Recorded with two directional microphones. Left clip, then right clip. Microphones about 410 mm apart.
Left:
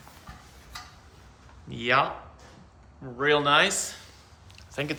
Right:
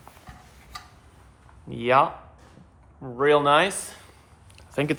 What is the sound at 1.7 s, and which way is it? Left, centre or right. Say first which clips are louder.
Speech: right 4 dB; centre.